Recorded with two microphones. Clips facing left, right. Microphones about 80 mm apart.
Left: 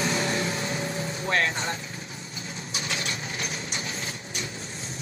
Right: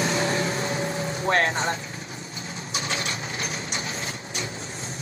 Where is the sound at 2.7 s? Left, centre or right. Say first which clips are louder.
Right 3 dB; right.